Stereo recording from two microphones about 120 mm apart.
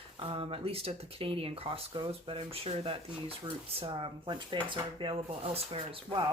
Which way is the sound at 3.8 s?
45° right (ahead or behind).